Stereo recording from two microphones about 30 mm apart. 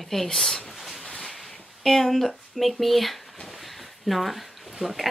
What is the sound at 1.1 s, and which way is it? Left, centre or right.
Boat, centre.